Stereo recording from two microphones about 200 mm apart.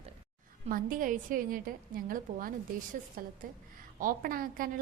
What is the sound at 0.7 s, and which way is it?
A woman's voice, 40° right (ahead or behind).